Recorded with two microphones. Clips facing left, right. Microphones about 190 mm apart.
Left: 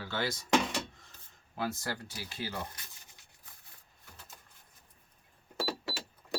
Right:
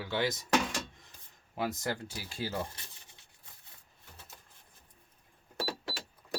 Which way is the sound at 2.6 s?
25° right (ahead or behind).